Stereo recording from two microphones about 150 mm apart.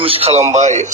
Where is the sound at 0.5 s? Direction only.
55° right (ahead or behind).